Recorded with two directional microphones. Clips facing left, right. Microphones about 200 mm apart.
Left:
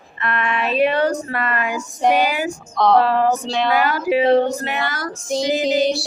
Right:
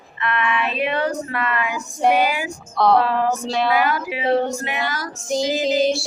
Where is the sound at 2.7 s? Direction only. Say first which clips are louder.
Left 2 dB; 5° right (ahead or behind).